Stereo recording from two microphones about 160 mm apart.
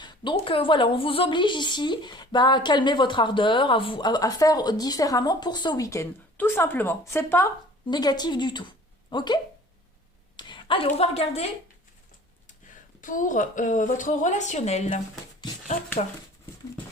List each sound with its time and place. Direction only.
0.0 s a woman's voice: 30° left (ahead or behind)
10.3 s a sound: 30° left (ahead or behind)
10.8 s a woman's voice: 40° left (ahead or behind)
13.0 s a woman's voice: 55° left (ahead or behind)